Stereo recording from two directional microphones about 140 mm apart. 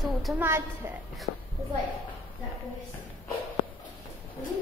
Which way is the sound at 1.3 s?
75° left (ahead or behind).